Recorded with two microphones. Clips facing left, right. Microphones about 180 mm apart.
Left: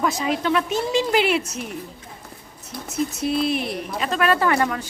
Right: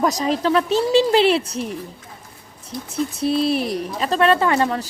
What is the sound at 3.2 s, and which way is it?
A woman's voice, 35° right (ahead or behind).